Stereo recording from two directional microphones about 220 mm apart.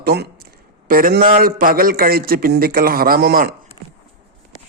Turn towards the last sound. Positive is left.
turn(degrees=-45)  # may be behind; listen again after turning